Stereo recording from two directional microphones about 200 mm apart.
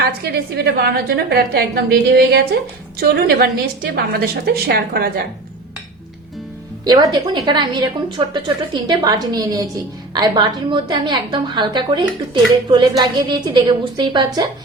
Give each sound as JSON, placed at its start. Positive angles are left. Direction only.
{"t": 0.0, "sound": "a woman's voice", "side_deg": -55}
{"t": 6.8, "sound": "a woman's voice", "side_deg": -20}